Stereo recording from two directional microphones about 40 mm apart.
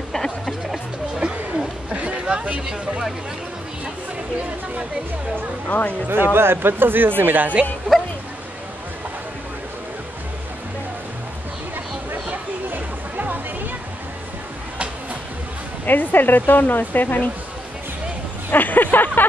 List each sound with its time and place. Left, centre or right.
1.2 s a sound: right
1.9 s chatter: right
5.7 s speech: left
6.0 s speech: right
7.9 s a sound: centre
12.3 s music: right
15.8 s speech: left
18.5 s speech: left